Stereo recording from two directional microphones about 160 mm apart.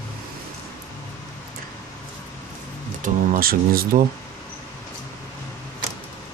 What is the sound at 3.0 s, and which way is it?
Speech, 60° right (ahead or behind).